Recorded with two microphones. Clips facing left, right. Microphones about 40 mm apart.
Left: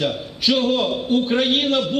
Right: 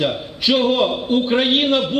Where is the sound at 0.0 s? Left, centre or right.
Right.